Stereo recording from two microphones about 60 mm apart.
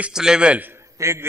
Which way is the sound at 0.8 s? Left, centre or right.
Right.